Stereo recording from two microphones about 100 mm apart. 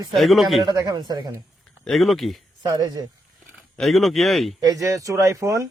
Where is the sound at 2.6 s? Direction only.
40° right (ahead or behind).